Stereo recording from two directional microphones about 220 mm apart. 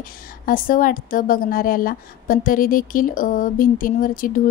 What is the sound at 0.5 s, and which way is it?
A woman's voice, 40° left (ahead or behind).